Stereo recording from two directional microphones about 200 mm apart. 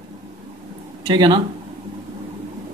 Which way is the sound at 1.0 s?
20° right (ahead or behind).